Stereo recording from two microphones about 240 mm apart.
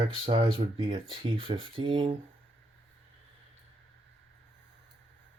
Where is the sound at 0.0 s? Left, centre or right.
Right.